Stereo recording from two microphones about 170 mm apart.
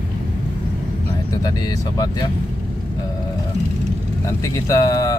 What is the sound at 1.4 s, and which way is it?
Speech, 20° left (ahead or behind).